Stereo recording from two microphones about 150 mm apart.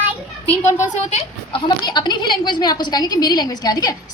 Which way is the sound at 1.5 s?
30° left (ahead or behind).